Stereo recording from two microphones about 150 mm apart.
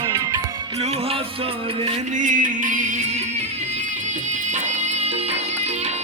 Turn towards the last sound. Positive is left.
turn(degrees=-45)  # may be behind; listen again after turning